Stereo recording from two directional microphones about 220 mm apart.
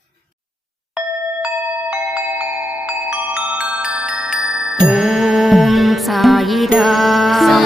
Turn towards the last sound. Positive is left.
turn(degrees=0)  # may be behind; listen again after turning